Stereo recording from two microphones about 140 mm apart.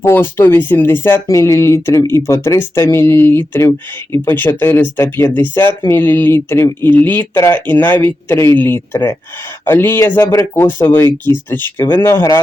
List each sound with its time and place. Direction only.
0.0 s speech: 15° left (ahead or behind)